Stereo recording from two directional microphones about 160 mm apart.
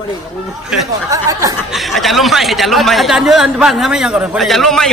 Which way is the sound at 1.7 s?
Centre (ahead or behind).